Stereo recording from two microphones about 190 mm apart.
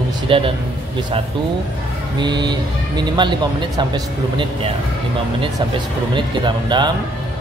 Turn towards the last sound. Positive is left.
turn(degrees=-25)  # may be behind; listen again after turning